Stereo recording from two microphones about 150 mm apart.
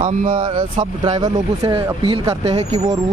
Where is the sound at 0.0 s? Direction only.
35° right (ahead or behind).